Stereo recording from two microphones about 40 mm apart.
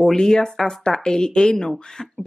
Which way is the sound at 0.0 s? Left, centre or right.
Centre.